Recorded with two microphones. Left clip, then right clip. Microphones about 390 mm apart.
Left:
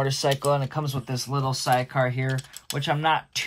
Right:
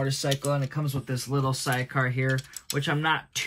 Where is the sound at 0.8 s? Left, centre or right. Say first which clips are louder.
Left 2 dB; centre.